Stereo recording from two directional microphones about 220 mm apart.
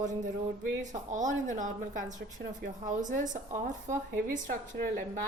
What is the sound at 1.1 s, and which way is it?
Speech, 35° right (ahead or behind).